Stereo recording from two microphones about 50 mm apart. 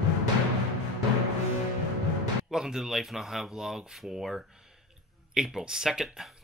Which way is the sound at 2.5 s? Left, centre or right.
Centre.